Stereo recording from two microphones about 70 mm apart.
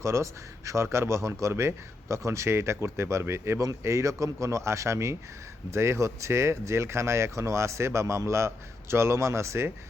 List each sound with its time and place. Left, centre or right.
0.0 s a man's voice: right